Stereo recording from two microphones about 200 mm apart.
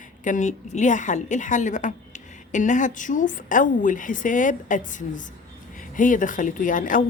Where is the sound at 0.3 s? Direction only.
40° left (ahead or behind).